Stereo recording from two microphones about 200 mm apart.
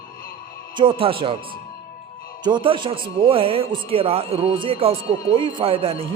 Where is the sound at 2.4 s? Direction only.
25° right (ahead or behind).